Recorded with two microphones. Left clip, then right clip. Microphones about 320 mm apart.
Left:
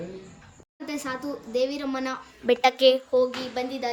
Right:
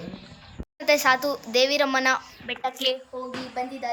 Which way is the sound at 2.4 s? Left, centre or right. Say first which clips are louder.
Left 9 dB; left.